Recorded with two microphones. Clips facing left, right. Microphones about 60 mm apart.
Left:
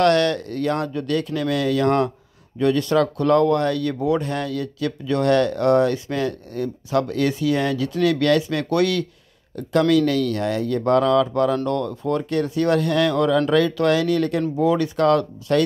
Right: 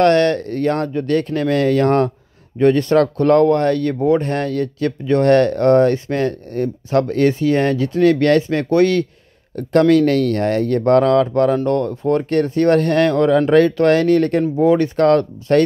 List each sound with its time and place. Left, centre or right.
0.0 s speech: right
9.6 s speech: right